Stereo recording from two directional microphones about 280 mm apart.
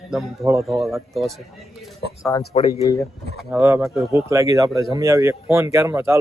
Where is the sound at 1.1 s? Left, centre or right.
Centre.